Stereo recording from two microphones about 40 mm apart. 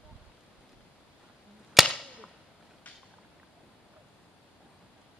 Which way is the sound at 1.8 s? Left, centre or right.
Centre.